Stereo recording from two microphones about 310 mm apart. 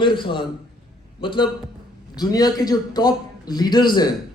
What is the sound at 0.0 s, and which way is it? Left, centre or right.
A man's voice, centre.